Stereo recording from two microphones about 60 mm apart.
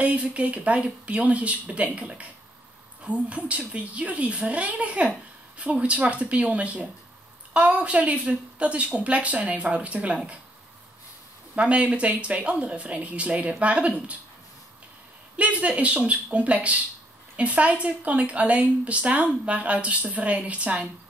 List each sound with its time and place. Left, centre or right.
0.0 s speech: right
11.5 s speech: right
15.3 s speech: right